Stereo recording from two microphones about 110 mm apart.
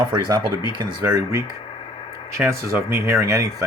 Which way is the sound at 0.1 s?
40° right (ahead or behind).